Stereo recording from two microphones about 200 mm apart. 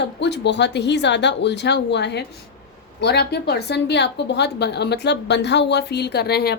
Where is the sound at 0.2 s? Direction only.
60° left (ahead or behind).